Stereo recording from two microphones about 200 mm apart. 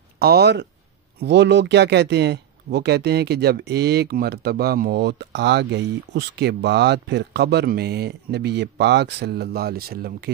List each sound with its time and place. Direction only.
0.2 s speech: 55° right (ahead or behind)